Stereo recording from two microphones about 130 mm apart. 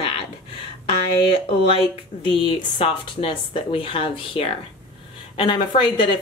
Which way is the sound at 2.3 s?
40° left (ahead or behind).